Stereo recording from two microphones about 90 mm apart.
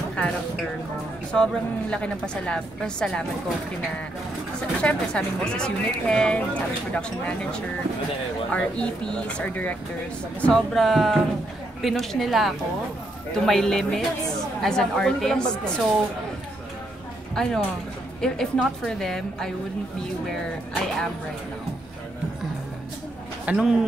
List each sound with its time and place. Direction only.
0.1 s a sound: 10° left (ahead or behind)
1.3 s speech: 5° left (ahead or behind)
4.6 s speech: 10° left (ahead or behind)
10.5 s a woman's voice: centre (ahead or behind)
17.3 s a woman's voice: 5° left (ahead or behind)
23.4 s speech: 5° right (ahead or behind)